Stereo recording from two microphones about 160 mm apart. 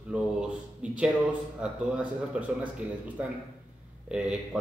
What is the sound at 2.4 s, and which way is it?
Speech, 5° right (ahead or behind).